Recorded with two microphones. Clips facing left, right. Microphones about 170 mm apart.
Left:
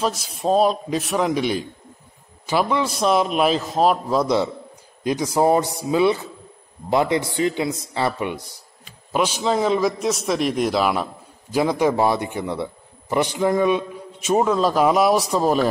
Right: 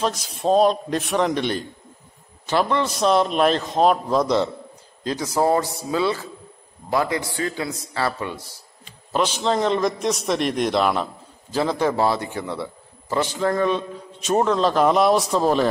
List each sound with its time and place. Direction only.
0.0 s a man's voice: 5° left (ahead or behind)